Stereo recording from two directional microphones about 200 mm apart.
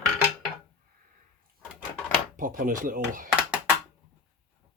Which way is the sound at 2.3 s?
40° right (ahead or behind).